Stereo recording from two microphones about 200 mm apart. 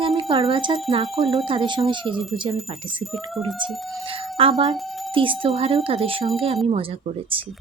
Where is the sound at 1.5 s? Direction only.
25° right (ahead or behind).